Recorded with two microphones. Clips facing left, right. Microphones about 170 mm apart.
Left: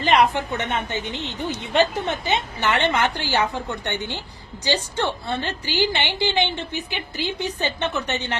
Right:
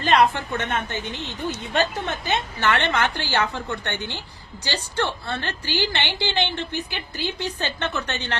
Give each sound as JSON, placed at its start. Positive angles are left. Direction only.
{"t": 0.0, "sound": "a woman's voice", "side_deg": 15}